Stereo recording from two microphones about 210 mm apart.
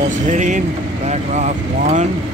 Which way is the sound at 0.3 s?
35° right (ahead or behind).